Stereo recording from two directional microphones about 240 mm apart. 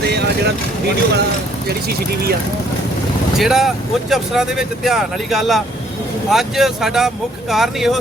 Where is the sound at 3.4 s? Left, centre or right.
Centre.